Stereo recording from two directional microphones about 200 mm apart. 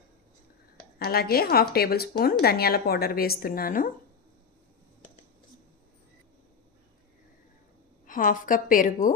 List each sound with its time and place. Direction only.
0.9 s speech: 50° left (ahead or behind)
8.0 s a woman's voice: 40° left (ahead or behind)